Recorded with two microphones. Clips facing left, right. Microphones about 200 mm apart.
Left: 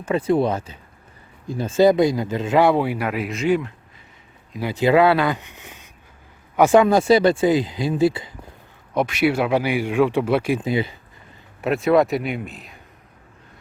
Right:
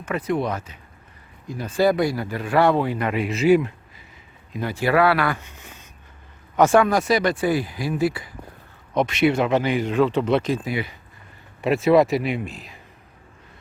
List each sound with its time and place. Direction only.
0.0 s speech: 30° left (ahead or behind); by 3.6 s 5° right (ahead or behind)
4.6 s speech: 20° left (ahead or behind)
9.0 s speech: 5° left (ahead or behind)
10.6 s speech: 25° left (ahead or behind)
11.6 s a man's voice: centre (ahead or behind)